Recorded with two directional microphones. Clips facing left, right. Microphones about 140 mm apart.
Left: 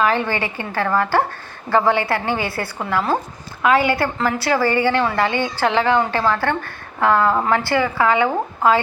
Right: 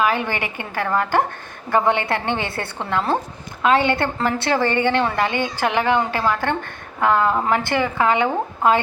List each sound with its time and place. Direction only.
0.0 s a woman's voice: 15° right (ahead or behind)